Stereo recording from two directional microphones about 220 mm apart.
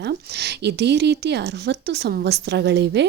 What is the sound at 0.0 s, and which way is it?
Speech, 50° right (ahead or behind).